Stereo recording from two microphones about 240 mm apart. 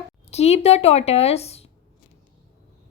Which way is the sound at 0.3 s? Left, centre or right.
Left.